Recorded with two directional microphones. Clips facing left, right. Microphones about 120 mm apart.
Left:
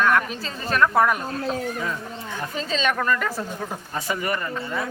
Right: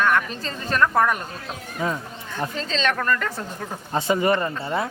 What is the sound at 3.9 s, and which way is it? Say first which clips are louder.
Speech: right 7 dB; 25° right (ahead or behind).